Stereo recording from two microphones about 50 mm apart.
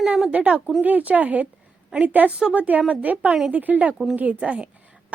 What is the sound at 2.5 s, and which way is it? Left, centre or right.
Speech, right.